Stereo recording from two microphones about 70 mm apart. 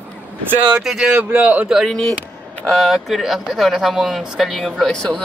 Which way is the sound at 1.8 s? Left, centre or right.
Centre.